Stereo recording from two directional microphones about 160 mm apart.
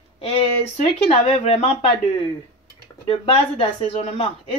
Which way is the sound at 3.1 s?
35° left (ahead or behind).